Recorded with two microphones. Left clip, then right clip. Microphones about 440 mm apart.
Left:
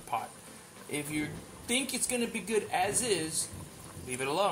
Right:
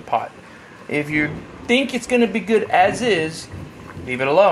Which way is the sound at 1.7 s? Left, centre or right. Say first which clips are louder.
Right 15 dB; left.